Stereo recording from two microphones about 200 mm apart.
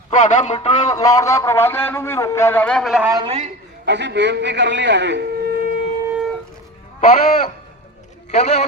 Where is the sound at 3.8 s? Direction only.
60° right (ahead or behind).